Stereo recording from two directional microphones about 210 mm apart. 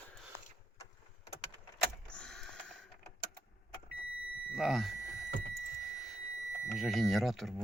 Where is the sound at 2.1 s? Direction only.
5° left (ahead or behind).